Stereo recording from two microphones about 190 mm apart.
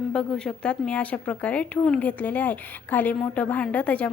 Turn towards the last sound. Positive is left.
turn(degrees=5)  # may be behind; listen again after turning